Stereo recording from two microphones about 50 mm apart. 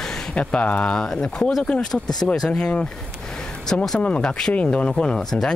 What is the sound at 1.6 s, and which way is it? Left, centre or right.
Speech, centre.